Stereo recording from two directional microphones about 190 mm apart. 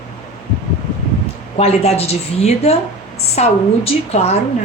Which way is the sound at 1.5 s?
35° left (ahead or behind).